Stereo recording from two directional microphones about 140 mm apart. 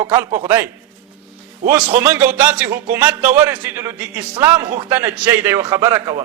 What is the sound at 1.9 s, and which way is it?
A man's voice, 15° right (ahead or behind).